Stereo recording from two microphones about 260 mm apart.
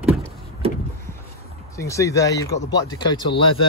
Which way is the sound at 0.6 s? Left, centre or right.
Right.